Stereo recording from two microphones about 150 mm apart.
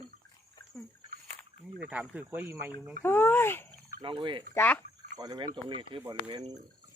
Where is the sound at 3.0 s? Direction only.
15° left (ahead or behind).